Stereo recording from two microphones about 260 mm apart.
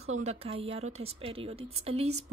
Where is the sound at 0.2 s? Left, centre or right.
Right.